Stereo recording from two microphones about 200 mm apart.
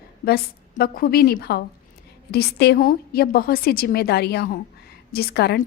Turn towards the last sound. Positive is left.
turn(degrees=55)  # may be behind; listen again after turning